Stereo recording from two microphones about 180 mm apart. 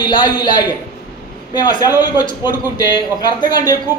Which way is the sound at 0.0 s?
25° left (ahead or behind).